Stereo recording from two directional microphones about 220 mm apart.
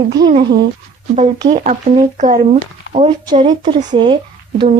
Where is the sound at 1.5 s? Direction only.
35° right (ahead or behind).